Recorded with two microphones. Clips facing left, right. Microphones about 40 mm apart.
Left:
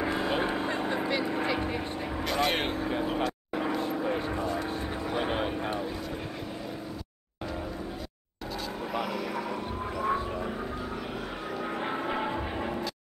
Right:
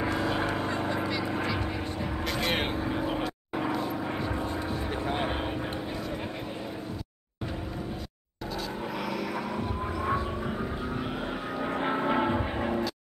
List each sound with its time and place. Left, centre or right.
0.1 s vehicle: centre
2.2 s vehicle: centre
8.9 s vehicle: centre
10.0 s vehicle: centre
11.6 s vehicle: centre